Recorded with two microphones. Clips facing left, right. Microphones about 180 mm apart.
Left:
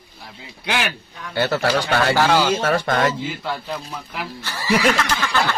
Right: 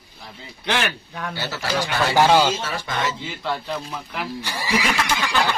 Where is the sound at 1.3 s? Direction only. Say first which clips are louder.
Left 7 dB; 55° left (ahead or behind).